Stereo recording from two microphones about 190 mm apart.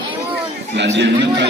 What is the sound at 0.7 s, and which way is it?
Speech, 70° right (ahead or behind).